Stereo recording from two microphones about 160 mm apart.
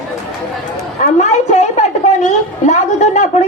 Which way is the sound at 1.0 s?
45° left (ahead or behind).